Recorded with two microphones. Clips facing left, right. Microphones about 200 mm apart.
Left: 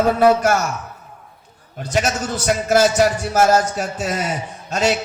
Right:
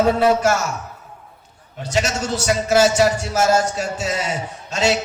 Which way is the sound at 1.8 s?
50° left (ahead or behind).